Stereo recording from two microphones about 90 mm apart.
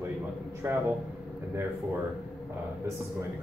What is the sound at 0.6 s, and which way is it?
Speech, 25° right (ahead or behind).